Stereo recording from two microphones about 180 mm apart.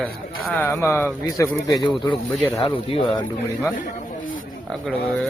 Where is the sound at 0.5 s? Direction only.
10° left (ahead or behind).